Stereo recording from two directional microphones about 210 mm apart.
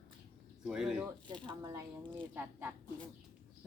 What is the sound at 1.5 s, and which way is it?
A woman's voice, 15° right (ahead or behind).